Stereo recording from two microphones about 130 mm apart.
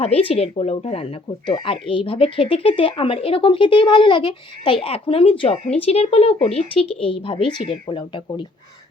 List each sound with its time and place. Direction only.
0.0 s speech: 50° left (ahead or behind)